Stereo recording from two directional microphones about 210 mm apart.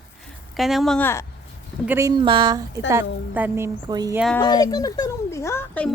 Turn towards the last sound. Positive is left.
turn(degrees=10)  # may be behind; listen again after turning